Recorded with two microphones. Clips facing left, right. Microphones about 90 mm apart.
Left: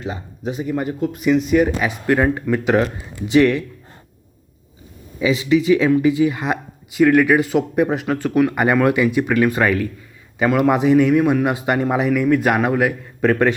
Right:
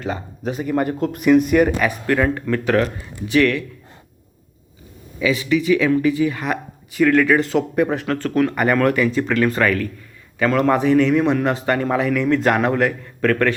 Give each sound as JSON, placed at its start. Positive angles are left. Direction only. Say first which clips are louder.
{"t": 0.0, "sound": "speech", "louder": "right 1 dB", "side_deg": -45}
{"t": 1.8, "sound": "speech", "louder": "left 1 dB", "side_deg": 15}
{"t": 5.2, "sound": "speech", "louder": "left 2 dB", "side_deg": 20}